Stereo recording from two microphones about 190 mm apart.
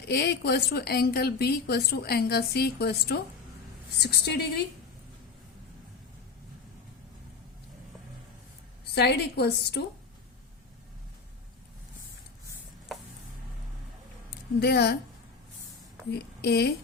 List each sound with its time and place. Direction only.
0.1 s a woman's voice: 60° left (ahead or behind)
9.0 s a woman's voice: 60° left (ahead or behind)
14.6 s a woman's voice: 60° left (ahead or behind)
16.4 s a woman's voice: 55° left (ahead or behind)